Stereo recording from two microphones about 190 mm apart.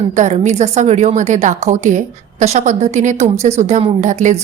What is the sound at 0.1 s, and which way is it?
Speech, 40° right (ahead or behind).